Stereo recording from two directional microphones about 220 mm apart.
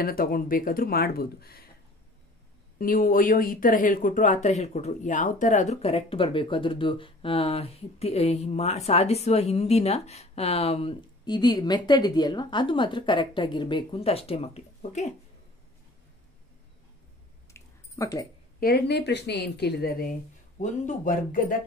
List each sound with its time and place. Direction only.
0.0 s a woman's voice: 40° left (ahead or behind)
2.8 s speech: 40° left (ahead or behind)
17.5 s a sound: 15° left (ahead or behind)
18.6 s a woman's voice: 50° left (ahead or behind)